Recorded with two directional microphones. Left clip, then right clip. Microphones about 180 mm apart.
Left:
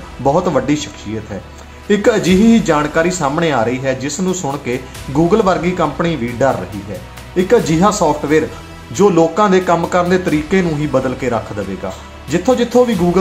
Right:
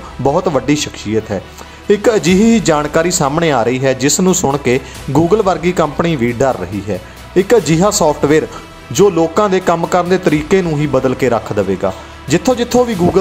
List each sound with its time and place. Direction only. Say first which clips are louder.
0.2 s speech: even; 35° right (ahead or behind)